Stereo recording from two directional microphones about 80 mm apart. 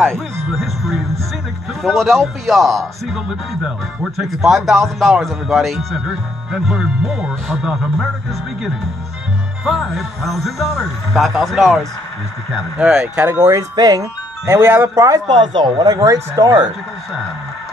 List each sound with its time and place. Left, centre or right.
0.5 s a man's voice: centre
12.9 s speech: right
14.5 s speech: right
15.0 s speech: right
15.3 s speech: right